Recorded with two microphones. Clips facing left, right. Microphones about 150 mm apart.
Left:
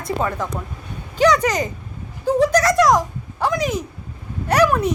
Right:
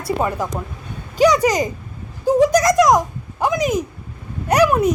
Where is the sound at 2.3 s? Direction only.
10° right (ahead or behind).